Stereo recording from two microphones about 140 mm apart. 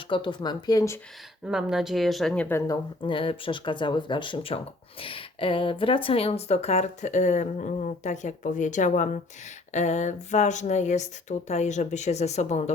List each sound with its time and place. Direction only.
0.1 s speech: 35° left (ahead or behind)
1.5 s speech: 5° right (ahead or behind); by 2.7 s 15° left (ahead or behind)
3.0 s speech: 35° left (ahead or behind); by 12.7 s 55° left (ahead or behind)